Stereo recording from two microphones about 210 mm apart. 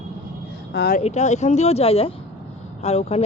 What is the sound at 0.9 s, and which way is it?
Speech, 35° left (ahead or behind).